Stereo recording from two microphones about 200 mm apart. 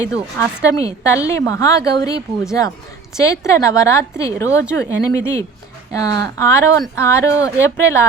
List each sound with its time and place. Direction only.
0.0 s a woman's voice: 15° left (ahead or behind)